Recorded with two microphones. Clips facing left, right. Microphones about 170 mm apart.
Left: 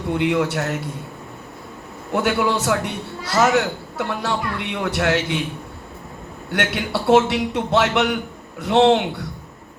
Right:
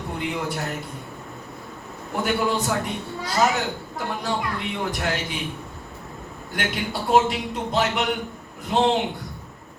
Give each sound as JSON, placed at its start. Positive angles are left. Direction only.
{"t": 0.2, "sound": "a man's voice", "side_deg": 75}
{"t": 2.1, "sound": "a man's voice", "side_deg": 75}
{"t": 6.5, "sound": "a man's voice", "side_deg": 75}